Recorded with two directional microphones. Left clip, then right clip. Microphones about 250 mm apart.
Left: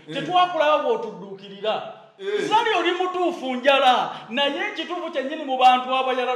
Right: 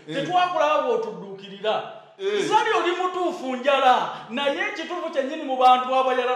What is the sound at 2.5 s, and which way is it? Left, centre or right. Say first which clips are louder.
A man's voice: left 1 dB; centre.